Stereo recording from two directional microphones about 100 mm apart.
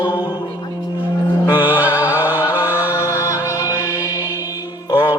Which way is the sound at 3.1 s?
20° right (ahead or behind).